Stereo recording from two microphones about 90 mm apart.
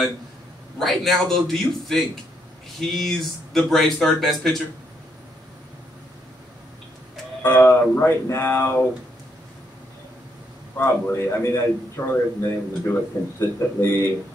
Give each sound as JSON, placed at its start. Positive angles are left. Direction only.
{"t": 0.7, "sound": "speech", "side_deg": 5}
{"t": 7.4, "sound": "a man's voice", "side_deg": 20}
{"t": 8.0, "sound": "a man's voice", "side_deg": 30}
{"t": 10.8, "sound": "a man's voice", "side_deg": 30}